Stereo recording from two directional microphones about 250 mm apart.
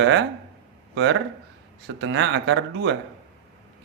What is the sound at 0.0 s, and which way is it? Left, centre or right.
Speech, right.